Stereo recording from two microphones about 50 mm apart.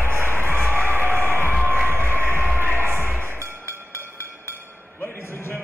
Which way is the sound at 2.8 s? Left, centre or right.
Right.